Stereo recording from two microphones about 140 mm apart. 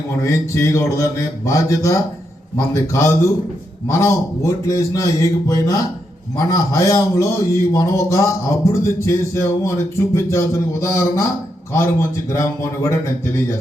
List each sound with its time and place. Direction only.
0.2 s a man's voice: 20° left (ahead or behind)
12.3 s a man's voice: 20° left (ahead or behind)